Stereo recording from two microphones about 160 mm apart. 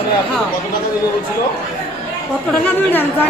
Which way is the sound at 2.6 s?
10° left (ahead or behind).